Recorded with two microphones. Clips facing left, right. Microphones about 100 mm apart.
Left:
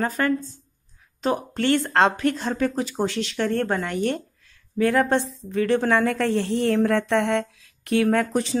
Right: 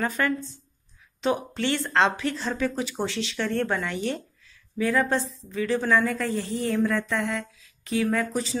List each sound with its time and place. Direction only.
0.0 s a woman's voice: 40° left (ahead or behind); by 8.5 s 55° left (ahead or behind)